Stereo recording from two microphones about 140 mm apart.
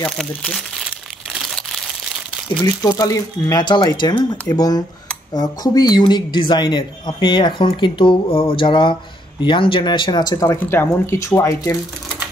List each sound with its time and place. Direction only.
0.2 s speech: centre (ahead or behind)
0.8 s crumpling: 5° right (ahead or behind)
2.5 s speech: 30° left (ahead or behind)
10.4 s speech: 15° left (ahead or behind)